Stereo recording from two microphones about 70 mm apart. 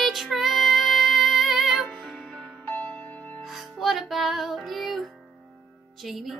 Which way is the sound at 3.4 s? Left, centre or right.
Centre.